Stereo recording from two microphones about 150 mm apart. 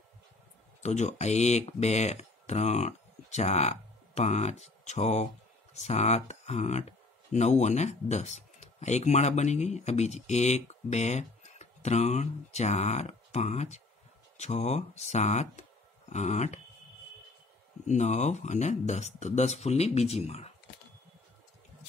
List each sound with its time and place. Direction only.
0.8 s speech: 50° left (ahead or behind)
17.8 s speech: 50° left (ahead or behind)